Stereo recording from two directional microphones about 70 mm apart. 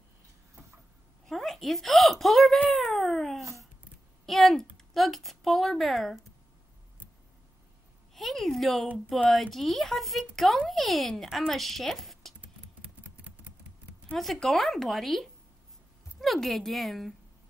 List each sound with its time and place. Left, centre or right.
1.2 s a sound: centre
4.3 s a woman's voice: centre
8.1 s a sound: centre
9.3 s speech: centre
12.8 s typing: centre
14.1 s speech: centre